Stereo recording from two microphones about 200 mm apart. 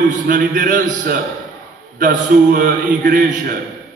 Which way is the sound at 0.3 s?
40° right (ahead or behind).